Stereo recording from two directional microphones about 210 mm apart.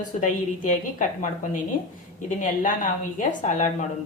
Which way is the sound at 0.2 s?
35° left (ahead or behind).